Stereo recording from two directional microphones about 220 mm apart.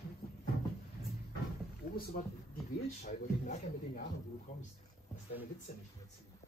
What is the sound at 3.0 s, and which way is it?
Speech, 35° left (ahead or behind).